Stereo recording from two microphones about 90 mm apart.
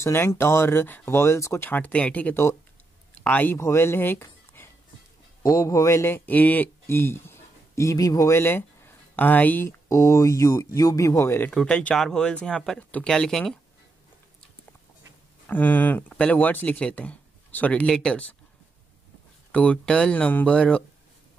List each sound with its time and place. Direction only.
0.0 s speech: 30° left (ahead or behind)
3.5 s speech: 30° left (ahead or behind)
5.4 s speech: 40° left (ahead or behind); by 9.7 s 20° left (ahead or behind)
9.7 s speech: 30° left (ahead or behind)
11.5 s speech: 10° left (ahead or behind)
15.4 s speech: 20° left (ahead or behind)
19.5 s speech: 15° left (ahead or behind)